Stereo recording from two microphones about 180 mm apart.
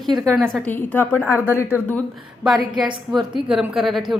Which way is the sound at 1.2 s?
10° right (ahead or behind).